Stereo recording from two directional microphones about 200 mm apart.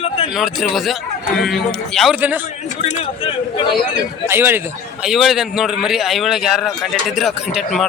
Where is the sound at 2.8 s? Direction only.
30° left (ahead or behind).